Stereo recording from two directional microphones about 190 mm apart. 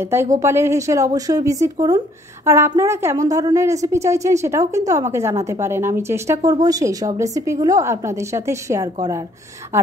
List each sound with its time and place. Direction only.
0.4 s a woman's voice: 15° right (ahead or behind)